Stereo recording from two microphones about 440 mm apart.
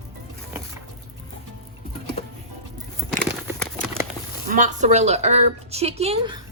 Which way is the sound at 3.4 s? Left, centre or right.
Centre.